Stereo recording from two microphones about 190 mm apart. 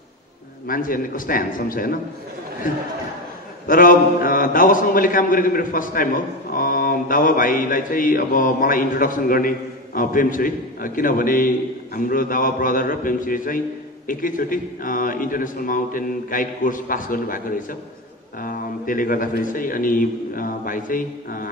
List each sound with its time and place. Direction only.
0.7 s a man's voice: 45° left (ahead or behind)
3.6 s a man's voice: 45° left (ahead or behind)